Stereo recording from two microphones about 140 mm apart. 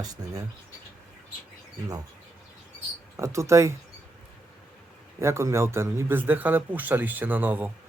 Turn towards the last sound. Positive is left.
turn(degrees=-15)  # may be behind; listen again after turning